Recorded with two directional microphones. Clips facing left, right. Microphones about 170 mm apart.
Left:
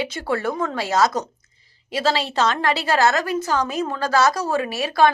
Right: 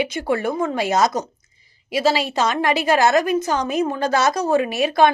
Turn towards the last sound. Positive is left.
turn(degrees=-20)  # may be behind; listen again after turning